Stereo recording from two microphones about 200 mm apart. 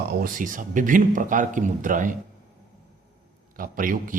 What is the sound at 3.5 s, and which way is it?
Speech, 45° right (ahead or behind).